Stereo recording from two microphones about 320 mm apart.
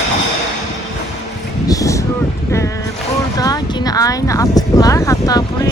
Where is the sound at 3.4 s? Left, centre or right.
Centre.